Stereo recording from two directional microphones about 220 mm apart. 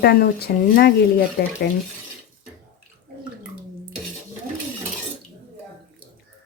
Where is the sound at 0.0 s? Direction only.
45° left (ahead or behind).